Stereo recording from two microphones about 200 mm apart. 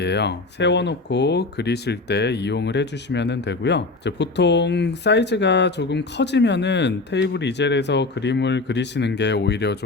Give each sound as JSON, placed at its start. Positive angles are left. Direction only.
{"t": 0.0, "sound": "speech", "side_deg": 55}